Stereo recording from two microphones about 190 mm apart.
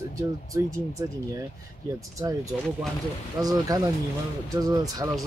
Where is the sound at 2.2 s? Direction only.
20° right (ahead or behind).